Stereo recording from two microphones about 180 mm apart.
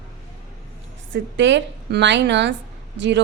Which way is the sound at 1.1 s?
90° right.